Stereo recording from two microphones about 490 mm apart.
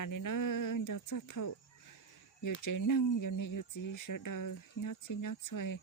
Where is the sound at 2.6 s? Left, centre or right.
Left.